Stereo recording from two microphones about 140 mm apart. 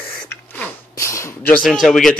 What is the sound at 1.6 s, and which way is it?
Speech, centre (ahead or behind).